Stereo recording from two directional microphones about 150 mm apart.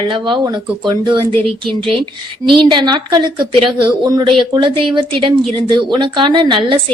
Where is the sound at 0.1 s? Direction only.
30° right (ahead or behind).